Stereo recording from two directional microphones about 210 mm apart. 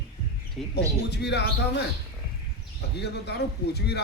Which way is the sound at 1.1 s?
55° left (ahead or behind).